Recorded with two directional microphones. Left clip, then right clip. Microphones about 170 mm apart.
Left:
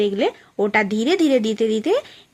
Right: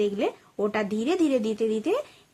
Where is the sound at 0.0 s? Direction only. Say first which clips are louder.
Left 6 dB; 15° left (ahead or behind).